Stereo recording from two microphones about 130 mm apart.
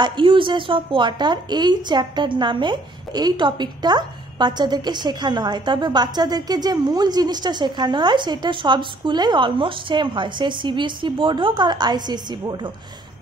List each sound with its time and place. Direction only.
0.0 s a woman's voice: 40° right (ahead or behind)